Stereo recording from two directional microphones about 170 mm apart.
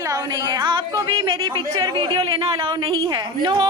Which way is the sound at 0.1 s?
20° right (ahead or behind).